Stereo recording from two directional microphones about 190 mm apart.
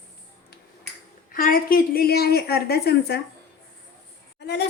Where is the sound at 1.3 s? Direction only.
50° left (ahead or behind).